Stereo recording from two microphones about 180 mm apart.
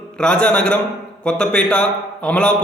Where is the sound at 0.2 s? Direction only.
5° left (ahead or behind).